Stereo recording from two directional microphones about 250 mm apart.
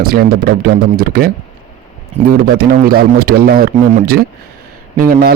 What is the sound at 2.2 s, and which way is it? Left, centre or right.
Speech, right.